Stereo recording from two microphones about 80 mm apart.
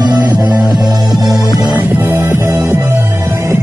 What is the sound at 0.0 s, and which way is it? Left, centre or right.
Music, right.